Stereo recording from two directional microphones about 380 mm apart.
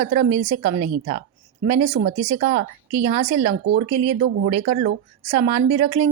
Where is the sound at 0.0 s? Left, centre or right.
Centre.